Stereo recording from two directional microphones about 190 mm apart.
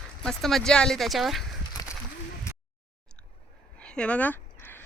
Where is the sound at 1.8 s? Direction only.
20° left (ahead or behind).